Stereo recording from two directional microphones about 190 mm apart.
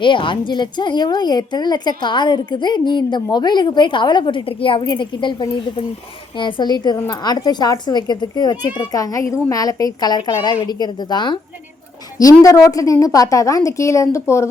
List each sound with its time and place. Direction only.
0.0 s a woman's voice: 25° left (ahead or behind)